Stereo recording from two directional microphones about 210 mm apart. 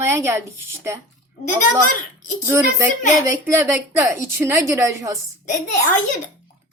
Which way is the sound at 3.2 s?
15° right (ahead or behind).